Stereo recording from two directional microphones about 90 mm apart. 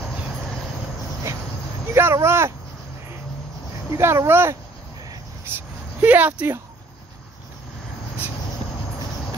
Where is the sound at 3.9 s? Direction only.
30° right (ahead or behind).